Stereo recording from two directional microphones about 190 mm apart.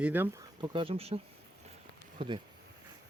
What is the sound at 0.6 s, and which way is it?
Speech, 25° right (ahead or behind).